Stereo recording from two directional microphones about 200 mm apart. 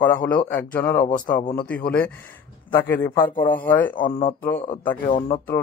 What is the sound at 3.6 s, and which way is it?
Speech, 10° left (ahead or behind).